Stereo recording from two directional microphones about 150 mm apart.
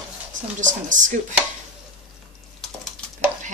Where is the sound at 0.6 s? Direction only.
55° right (ahead or behind).